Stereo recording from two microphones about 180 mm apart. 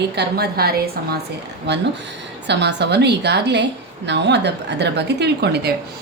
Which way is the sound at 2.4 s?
70° right (ahead or behind).